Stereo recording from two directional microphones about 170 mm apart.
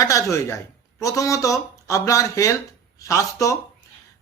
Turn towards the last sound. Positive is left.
turn(degrees=20)  # may be behind; listen again after turning